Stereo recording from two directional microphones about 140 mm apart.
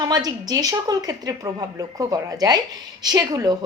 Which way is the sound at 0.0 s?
30° right (ahead or behind).